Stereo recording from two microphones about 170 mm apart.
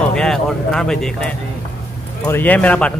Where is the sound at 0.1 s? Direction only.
5° left (ahead or behind).